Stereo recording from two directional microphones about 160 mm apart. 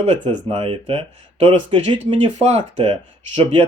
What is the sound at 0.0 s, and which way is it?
Speech, 40° right (ahead or behind).